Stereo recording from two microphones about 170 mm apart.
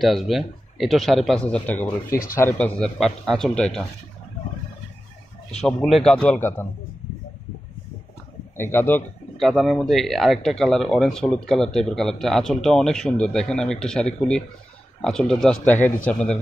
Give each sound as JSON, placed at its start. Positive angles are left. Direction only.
{"t": 0.0, "sound": "speech", "side_deg": 0}
{"t": 2.0, "sound": "speech", "side_deg": 55}
{"t": 2.3, "sound": "a man's voice", "side_deg": 10}
{"t": 5.5, "sound": "speech", "side_deg": 5}
{"t": 8.5, "sound": "a man's voice", "side_deg": 15}
{"t": 9.4, "sound": "speech", "side_deg": 0}